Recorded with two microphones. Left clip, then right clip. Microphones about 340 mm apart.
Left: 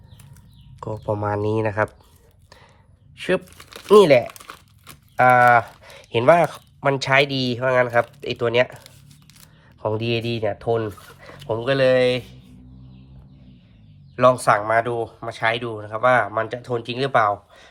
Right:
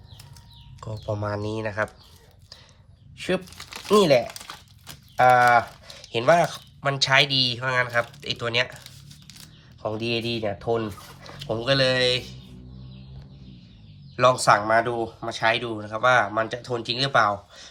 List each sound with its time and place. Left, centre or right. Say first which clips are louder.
0.8 s speech: left 6 dB; centre
3.2 s crumpling: left 4 dB; left
5.1 s speech: left 3 dB; centre
9.8 s speech: left 3 dB; centre
14.2 s speech: left 2 dB; left